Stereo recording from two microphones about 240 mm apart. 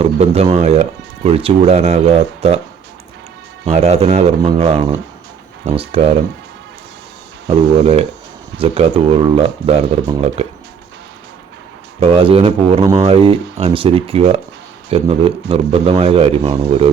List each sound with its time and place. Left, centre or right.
0.0 s speech: right
3.7 s speech: right
7.4 s speech: right
11.9 s speech: right